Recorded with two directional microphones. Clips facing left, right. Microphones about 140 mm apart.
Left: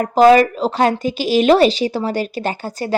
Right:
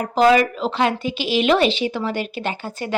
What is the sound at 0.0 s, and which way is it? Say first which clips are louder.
Speech: left 5 dB; 45° left (ahead or behind).